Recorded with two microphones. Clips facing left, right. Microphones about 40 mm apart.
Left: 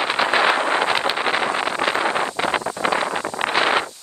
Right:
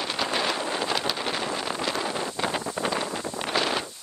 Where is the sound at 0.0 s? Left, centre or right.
Left.